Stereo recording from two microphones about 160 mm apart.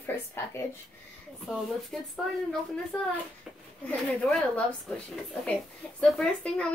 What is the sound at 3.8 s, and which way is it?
Speech, 5° left (ahead or behind).